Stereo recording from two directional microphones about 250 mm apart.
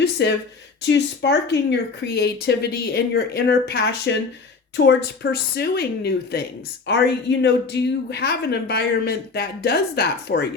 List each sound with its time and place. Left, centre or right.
0.0 s speech: left